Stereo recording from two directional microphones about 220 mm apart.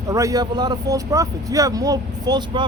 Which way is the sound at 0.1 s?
15° right (ahead or behind).